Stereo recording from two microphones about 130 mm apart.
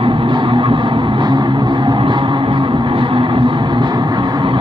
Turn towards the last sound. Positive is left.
turn(degrees=-35)  # may be behind; listen again after turning